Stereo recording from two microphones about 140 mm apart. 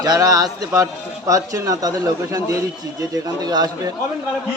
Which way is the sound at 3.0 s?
25° right (ahead or behind).